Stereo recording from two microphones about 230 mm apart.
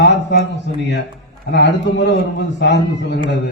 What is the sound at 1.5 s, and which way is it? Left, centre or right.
A man's voice, left.